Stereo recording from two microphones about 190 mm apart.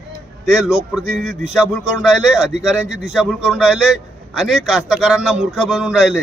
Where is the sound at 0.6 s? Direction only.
15° left (ahead or behind).